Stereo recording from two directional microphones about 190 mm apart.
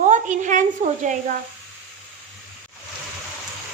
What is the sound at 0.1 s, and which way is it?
Sizzle, 40° right (ahead or behind).